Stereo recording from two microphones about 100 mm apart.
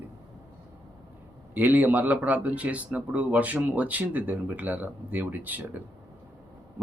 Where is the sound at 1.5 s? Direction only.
20° right (ahead or behind).